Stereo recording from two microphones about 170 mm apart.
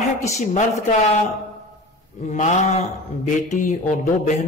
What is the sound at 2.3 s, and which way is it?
A man's voice, 45° left (ahead or behind).